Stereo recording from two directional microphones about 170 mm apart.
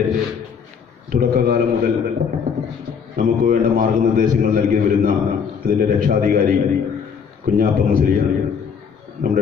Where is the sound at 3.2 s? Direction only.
55° right (ahead or behind).